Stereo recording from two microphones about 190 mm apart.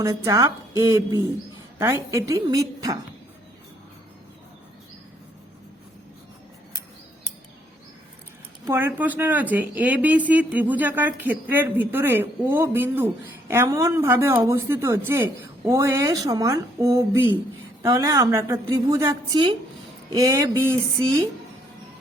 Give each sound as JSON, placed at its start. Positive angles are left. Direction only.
{"t": 0.0, "sound": "speech", "side_deg": -15}
{"t": 8.6, "sound": "speech", "side_deg": -10}